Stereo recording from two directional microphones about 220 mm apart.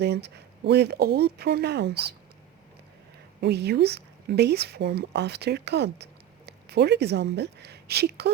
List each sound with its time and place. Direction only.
0.0 s speech: 50° right (ahead or behind)
3.4 s speech: 50° right (ahead or behind)